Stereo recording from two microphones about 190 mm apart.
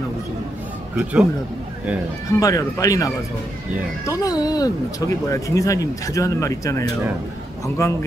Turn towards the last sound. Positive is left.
turn(degrees=15)  # may be behind; listen again after turning